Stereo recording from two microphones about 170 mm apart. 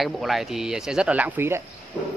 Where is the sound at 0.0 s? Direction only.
Centre (ahead or behind).